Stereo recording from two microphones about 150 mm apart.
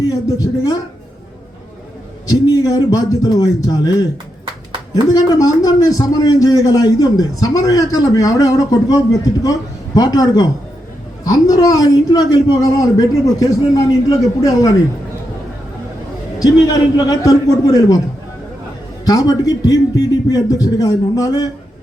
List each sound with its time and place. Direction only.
0.1 s a man's voice: 25° left (ahead or behind)
2.2 s a man's voice: 25° left (ahead or behind)
5.0 s a man's voice: 25° left (ahead or behind)
16.4 s a man's voice: 25° left (ahead or behind)
19.0 s a man's voice: 25° left (ahead or behind)